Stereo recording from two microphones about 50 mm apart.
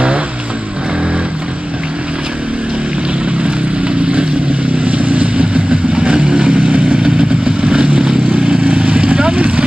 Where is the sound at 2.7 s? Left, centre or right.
Right.